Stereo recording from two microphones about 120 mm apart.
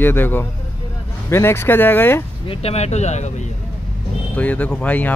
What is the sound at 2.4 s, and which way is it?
Speech, 60° left (ahead or behind).